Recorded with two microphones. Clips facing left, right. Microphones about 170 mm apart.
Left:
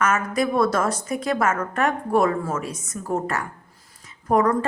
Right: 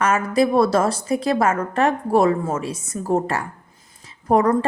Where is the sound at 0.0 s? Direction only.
30° right (ahead or behind).